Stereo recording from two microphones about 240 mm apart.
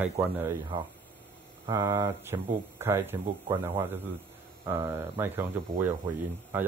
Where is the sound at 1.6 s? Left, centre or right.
Centre.